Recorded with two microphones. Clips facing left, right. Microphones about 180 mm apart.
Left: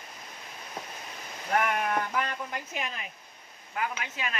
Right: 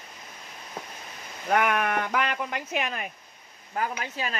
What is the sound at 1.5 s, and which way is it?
Speech, 75° right (ahead or behind).